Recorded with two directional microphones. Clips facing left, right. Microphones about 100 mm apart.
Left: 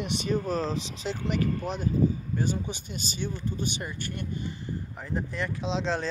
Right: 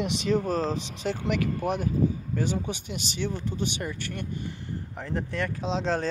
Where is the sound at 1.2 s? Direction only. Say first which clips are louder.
Right 1 dB; 75° right (ahead or behind).